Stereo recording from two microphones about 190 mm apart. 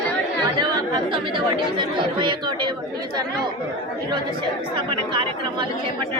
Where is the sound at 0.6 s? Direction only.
20° right (ahead or behind).